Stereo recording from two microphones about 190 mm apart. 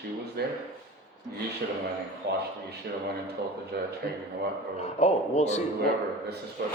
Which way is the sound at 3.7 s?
55° right (ahead or behind).